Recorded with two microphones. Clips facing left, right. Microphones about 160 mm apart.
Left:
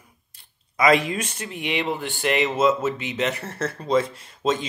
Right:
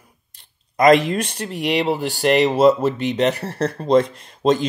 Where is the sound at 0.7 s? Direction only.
35° right (ahead or behind).